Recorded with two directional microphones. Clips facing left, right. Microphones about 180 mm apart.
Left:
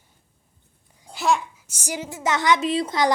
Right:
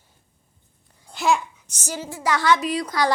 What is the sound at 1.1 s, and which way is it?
A child's voice, centre (ahead or behind).